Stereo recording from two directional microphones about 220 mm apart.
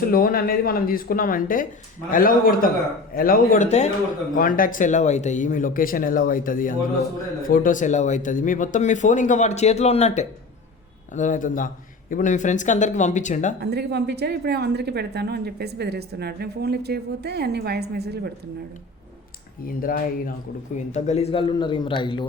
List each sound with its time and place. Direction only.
0.0 s speech: 40° left (ahead or behind)
13.6 s a woman's voice: 50° right (ahead or behind)
19.6 s a man's voice: 40° left (ahead or behind); by 22.3 s 20° left (ahead or behind)